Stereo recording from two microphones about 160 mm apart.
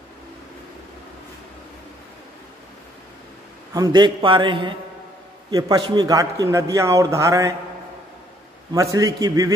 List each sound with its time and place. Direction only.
3.7 s a man's voice: 25° right (ahead or behind)
8.7 s a man's voice: 20° right (ahead or behind)